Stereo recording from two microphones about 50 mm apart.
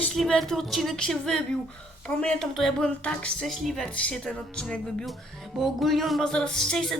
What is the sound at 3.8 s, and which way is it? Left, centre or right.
Speech, left.